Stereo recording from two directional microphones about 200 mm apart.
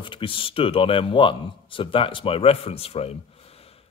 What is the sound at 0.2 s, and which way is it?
Speech, 25° left (ahead or behind).